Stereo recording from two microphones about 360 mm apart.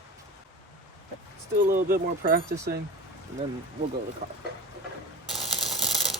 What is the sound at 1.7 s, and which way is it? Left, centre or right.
Speech, right.